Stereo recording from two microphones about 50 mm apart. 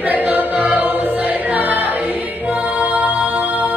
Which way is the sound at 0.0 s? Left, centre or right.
Right.